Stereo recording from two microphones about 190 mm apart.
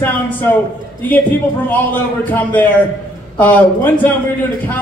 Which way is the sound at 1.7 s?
10° left (ahead or behind).